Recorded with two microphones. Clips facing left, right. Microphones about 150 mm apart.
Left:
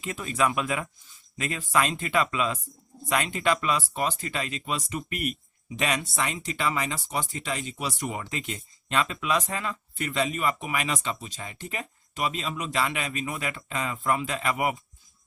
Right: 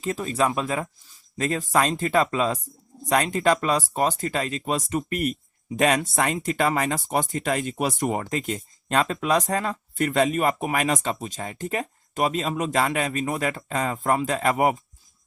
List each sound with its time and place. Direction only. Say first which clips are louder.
0.0 s speech: right 3 dB; 35° right (ahead or behind)